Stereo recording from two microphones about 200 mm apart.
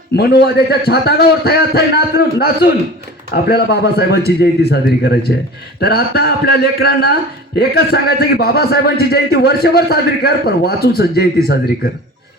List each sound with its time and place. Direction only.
0.4 s a man's voice: 55° left (ahead or behind)